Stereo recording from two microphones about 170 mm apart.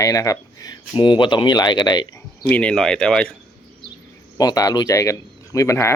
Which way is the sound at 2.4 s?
10° left (ahead or behind).